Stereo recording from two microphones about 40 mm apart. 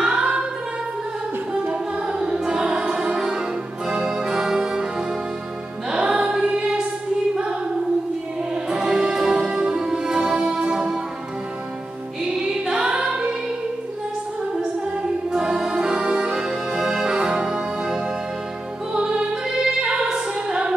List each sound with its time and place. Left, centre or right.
0.0 s singing: centre
1.5 s a capella: right
2.1 s music: centre
6.3 s choir: centre
8.6 s music: centre
12.2 s music: centre
14.6 s music: right
16.3 s music: centre